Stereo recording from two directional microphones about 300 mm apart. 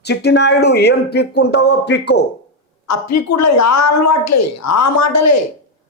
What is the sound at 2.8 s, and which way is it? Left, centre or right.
A man's voice, left.